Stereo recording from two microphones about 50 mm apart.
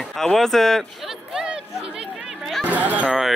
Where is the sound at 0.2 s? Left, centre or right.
Centre.